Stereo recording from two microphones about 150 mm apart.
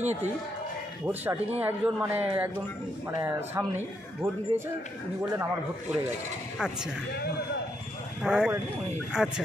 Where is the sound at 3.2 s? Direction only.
15° right (ahead or behind).